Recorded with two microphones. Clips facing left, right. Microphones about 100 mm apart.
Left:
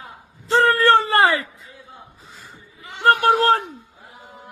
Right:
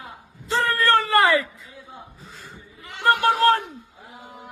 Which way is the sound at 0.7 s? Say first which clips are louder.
Left 3 dB; 30° left (ahead or behind).